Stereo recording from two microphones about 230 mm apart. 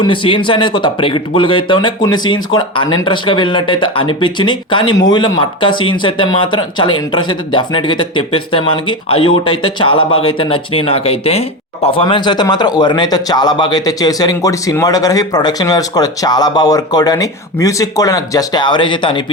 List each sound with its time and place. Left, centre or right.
0.0 s speech: left